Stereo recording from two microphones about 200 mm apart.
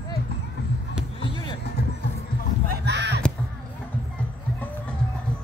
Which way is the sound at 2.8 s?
55° right (ahead or behind).